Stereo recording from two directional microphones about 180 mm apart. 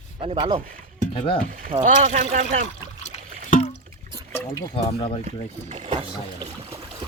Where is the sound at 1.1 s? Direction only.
30° left (ahead or behind).